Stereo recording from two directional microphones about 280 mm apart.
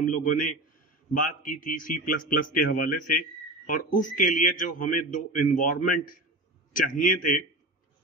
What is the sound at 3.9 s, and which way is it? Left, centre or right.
A man's voice, left.